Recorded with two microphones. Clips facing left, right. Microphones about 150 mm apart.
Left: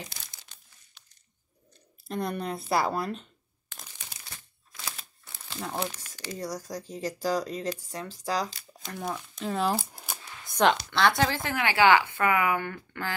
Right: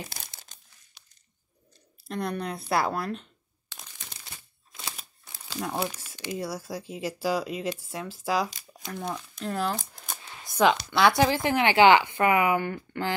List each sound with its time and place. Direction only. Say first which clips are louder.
2.0 s speech: even; centre (ahead or behind)
4.9 s crumpling: even; 10° right (ahead or behind)
6.3 s speech: right 2 dB; 5° right (ahead or behind)
9.8 s a sound: left 3 dB; 5° left (ahead or behind)
10.6 s speech: right 2 dB; 10° right (ahead or behind)